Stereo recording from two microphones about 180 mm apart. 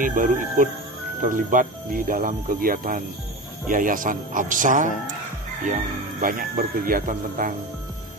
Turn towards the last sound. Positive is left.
turn(degrees=-50)  # may be behind; listen again after turning